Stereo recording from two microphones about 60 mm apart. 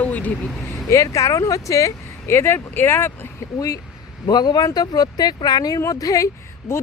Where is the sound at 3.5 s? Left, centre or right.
Left.